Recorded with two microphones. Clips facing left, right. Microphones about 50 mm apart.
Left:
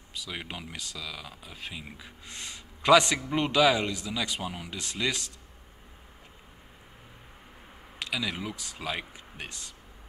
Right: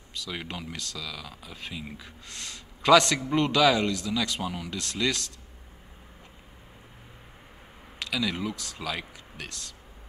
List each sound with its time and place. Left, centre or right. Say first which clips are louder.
0.1 s speech: right 2 dB; centre
8.0 s speech: right 3 dB; centre